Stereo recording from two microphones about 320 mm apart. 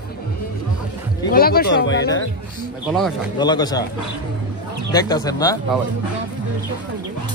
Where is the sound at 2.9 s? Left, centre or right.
Centre.